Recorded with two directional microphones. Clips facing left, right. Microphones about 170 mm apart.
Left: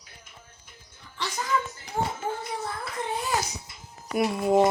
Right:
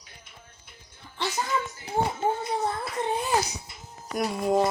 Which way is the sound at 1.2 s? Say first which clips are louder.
Even; 30° right (ahead or behind).